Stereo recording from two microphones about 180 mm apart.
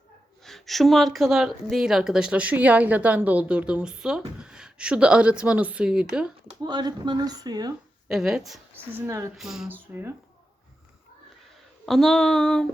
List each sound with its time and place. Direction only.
0.4 s a woman's voice: centre (ahead or behind)
6.6 s speech: 25° right (ahead or behind)
8.0 s a woman's voice: 5° right (ahead or behind)
9.3 s speech: centre (ahead or behind)
11.9 s a woman's voice: centre (ahead or behind)